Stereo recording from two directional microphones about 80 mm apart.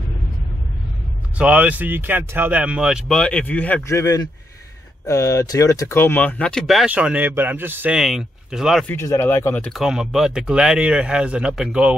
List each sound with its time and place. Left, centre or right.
1.4 s speech: centre
3.1 s speech: centre
3.8 s speech: left
5.9 s speech: left
6.6 s speech: centre
6.9 s speech: centre
7.9 s speech: centre
8.9 s speech: left
9.7 s speech: centre